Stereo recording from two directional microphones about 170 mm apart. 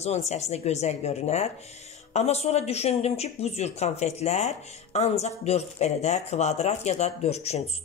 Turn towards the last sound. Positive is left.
turn(degrees=40)  # may be behind; listen again after turning